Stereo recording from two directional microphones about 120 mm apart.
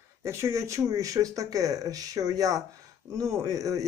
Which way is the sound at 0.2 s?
25° right (ahead or behind).